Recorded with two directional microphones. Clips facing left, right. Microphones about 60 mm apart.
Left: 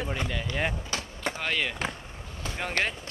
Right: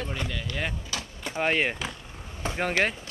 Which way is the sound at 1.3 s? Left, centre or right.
Right.